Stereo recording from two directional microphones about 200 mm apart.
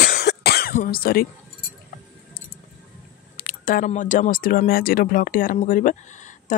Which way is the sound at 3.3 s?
45° left (ahead or behind).